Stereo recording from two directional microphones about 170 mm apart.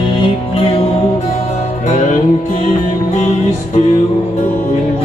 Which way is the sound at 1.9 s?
45° left (ahead or behind).